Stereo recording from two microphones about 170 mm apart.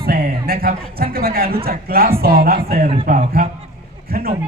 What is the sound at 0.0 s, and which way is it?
A man's voice, 60° right (ahead or behind).